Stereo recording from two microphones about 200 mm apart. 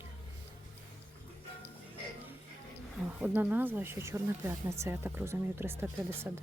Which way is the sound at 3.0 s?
10° right (ahead or behind).